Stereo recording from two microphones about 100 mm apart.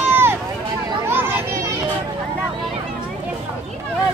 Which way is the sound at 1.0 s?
20° right (ahead or behind).